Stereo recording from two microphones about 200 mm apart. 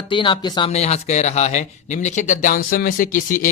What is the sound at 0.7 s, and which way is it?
Speech, 35° left (ahead or behind).